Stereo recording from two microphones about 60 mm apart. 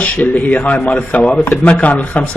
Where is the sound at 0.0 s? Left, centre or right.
Left.